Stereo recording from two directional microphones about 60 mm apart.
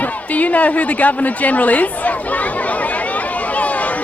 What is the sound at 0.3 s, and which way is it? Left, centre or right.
Speech, left.